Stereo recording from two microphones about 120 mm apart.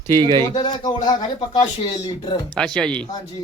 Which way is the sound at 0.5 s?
35° left (ahead or behind).